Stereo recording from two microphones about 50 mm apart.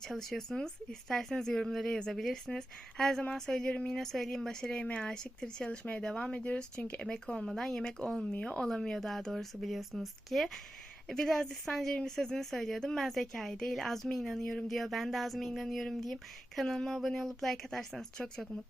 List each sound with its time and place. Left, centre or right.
0.0 s a woman's voice: centre
1.9 s a woman's voice: centre
2.1 s a woman's voice: centre; by 5.0 s left
5.0 s a woman's voice: centre
7.0 s a woman's voice: centre